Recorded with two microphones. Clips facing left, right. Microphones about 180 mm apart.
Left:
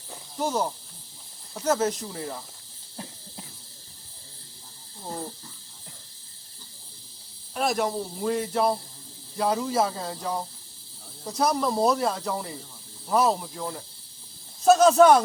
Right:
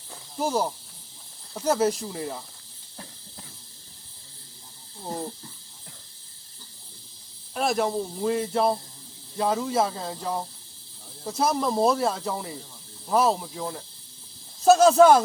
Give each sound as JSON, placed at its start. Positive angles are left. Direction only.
{"t": 0.3, "sound": "speech", "side_deg": -10}
{"t": 5.0, "sound": "cricket", "side_deg": -25}
{"t": 7.5, "sound": "speech", "side_deg": 0}